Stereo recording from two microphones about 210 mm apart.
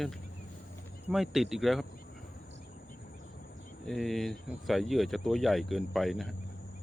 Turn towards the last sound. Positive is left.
turn(degrees=0)  # may be behind; listen again after turning